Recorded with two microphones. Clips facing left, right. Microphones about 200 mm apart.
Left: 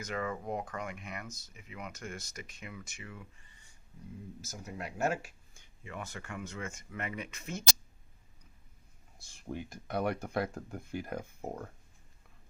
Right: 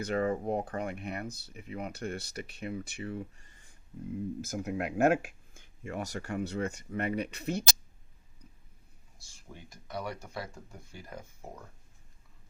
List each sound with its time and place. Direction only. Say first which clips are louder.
0.0 s speech: right 7 dB; 35° right (ahead or behind)
4.4 s speech: right 9 dB; 55° right (ahead or behind); by 7.6 s 35° right (ahead or behind)
9.2 s speech: left 10 dB; 60° left (ahead or behind)